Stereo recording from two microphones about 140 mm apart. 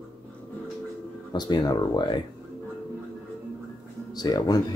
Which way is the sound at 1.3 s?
30° left (ahead or behind).